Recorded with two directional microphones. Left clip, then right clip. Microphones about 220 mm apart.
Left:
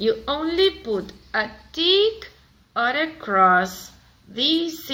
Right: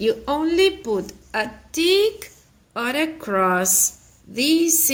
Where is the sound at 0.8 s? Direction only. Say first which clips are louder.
Right 2 dB; 55° right (ahead or behind).